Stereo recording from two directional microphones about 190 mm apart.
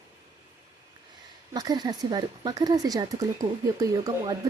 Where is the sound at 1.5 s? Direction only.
20° right (ahead or behind).